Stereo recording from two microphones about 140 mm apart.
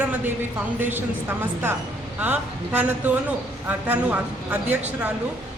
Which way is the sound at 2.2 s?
10° right (ahead or behind).